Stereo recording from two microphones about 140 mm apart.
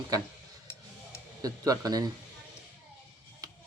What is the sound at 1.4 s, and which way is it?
Speech, 25° right (ahead or behind).